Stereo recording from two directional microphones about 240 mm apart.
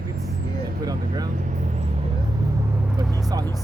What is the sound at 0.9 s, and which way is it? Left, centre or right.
Vehicle, centre.